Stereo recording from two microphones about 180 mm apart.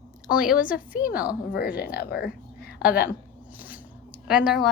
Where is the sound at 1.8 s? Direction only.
55° left (ahead or behind).